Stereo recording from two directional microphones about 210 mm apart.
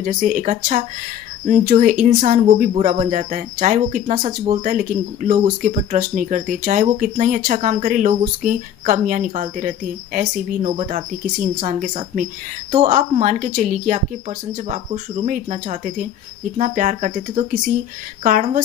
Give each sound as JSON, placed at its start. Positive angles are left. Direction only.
{"t": 0.0, "sound": "speech", "side_deg": -40}